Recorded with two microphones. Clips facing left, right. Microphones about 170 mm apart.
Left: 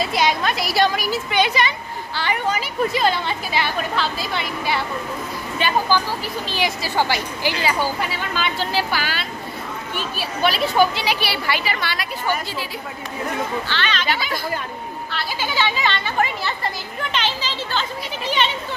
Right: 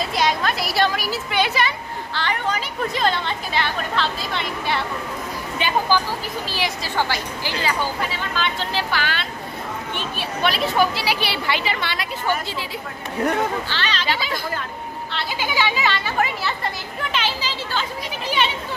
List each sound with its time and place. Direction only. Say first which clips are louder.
0.0 s speech: left 1 dB; centre (ahead or behind)
2.1 s speech: left 2 dB; 10° left (ahead or behind)
5.6 s speech: left 2 dB; 20° right (ahead or behind)
6.5 s speech: left 4 dB; centre (ahead or behind)
7.0 s speech: left 3 dB; 10° left (ahead or behind)
11.1 s speech: even; 20° right (ahead or behind)
13.7 s speech: left 2 dB; 35° right (ahead or behind)
15.1 s speech: even; 15° right (ahead or behind)